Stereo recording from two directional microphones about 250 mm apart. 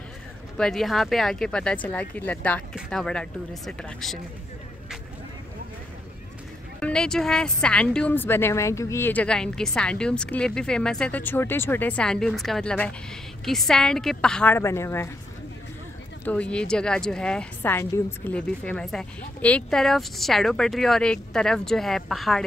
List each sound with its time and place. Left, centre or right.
0.6 s speech: centre
6.8 s speech: centre
16.3 s speech: centre